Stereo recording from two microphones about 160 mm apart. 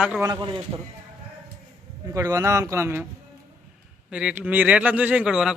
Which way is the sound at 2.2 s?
20° right (ahead or behind).